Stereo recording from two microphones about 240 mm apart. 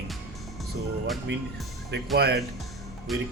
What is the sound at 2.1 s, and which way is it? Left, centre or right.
Speech, right.